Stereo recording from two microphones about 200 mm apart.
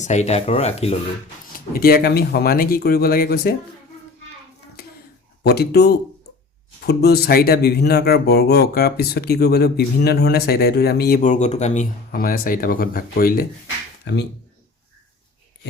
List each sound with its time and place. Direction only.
0.0 s speech: 35° left (ahead or behind)
1.5 s speech: 50° left (ahead or behind)
4.8 s a sound: 50° left (ahead or behind)
5.4 s speech: 55° left (ahead or behind)
14.0 s speech: 55° left (ahead or behind)